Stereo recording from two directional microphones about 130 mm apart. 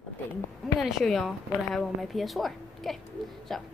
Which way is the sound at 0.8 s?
Centre (ahead or behind).